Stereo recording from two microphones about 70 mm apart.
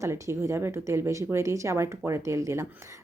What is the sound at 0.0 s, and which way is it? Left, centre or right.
A woman's voice, right.